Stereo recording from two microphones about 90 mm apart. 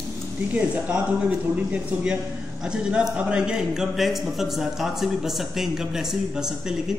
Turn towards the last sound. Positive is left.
turn(degrees=-5)  # may be behind; listen again after turning